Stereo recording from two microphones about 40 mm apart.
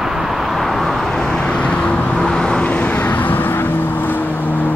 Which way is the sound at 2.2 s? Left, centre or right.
Centre.